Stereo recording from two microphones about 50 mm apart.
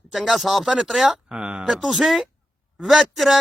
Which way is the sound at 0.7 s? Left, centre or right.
Centre.